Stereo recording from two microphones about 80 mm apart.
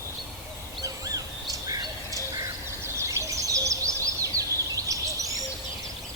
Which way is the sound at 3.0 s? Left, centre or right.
Right.